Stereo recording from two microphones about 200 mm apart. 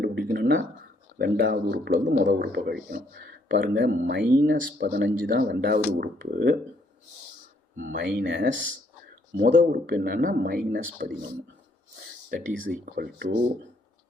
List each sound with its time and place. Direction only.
0.0 s a sound: 50° right (ahead or behind)
1.5 s speech: 50° right (ahead or behind)
7.8 s speech: 45° right (ahead or behind)
12.3 s speech: 45° right (ahead or behind)